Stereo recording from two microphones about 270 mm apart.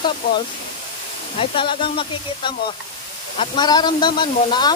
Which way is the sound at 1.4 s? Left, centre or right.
Centre.